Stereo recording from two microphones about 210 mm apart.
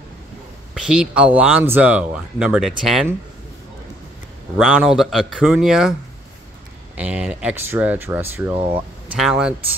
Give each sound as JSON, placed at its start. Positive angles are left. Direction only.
{"t": 0.7, "sound": "speech", "side_deg": -5}
{"t": 4.6, "sound": "speech", "side_deg": 0}
{"t": 7.0, "sound": "speech", "side_deg": -5}